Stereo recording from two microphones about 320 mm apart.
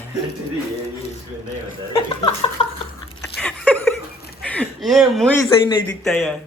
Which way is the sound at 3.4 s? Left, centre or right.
Centre.